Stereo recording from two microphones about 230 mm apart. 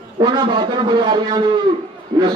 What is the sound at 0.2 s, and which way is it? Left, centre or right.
A man's voice, centre.